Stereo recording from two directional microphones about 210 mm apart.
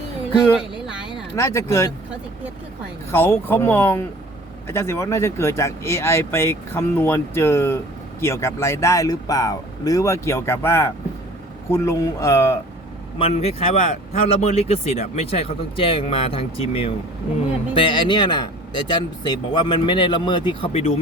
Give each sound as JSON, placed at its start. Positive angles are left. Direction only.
{"t": 1.4, "sound": "speech", "side_deg": 15}
{"t": 3.1, "sound": "speech", "side_deg": 10}
{"t": 13.1, "sound": "speech", "side_deg": 30}